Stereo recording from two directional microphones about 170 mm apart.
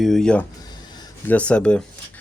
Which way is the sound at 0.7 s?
25° left (ahead or behind).